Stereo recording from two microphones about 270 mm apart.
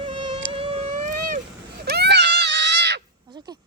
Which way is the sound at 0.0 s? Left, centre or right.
Centre.